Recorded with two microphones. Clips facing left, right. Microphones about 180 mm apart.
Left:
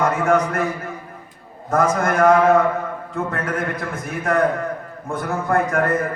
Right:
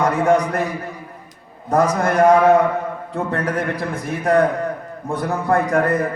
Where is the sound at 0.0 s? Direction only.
35° right (ahead or behind).